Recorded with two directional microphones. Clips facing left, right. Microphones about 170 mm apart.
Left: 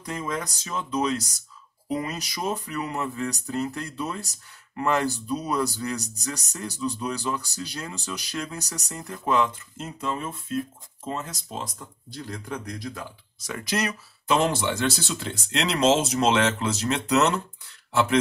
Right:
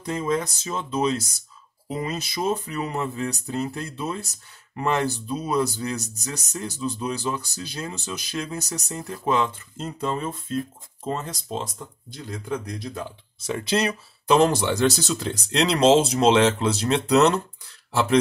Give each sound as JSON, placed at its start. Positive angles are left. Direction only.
{"t": 0.0, "sound": "speech", "side_deg": -25}